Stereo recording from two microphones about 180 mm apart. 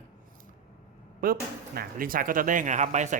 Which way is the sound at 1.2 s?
55° right (ahead or behind).